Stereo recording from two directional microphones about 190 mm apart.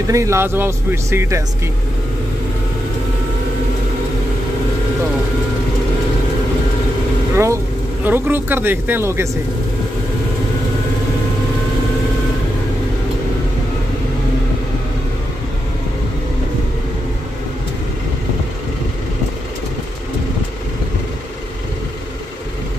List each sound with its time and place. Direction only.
0.1 s speech: 15° right (ahead or behind)
7.3 s speech: 15° right (ahead or behind)